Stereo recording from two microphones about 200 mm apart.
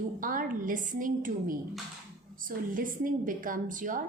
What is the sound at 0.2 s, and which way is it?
A woman's voice, 45° right (ahead or behind).